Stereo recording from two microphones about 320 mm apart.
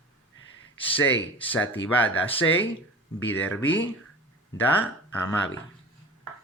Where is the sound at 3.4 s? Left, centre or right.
Centre.